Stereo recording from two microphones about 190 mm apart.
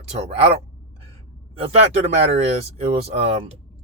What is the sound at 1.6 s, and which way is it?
Speech, 35° right (ahead or behind).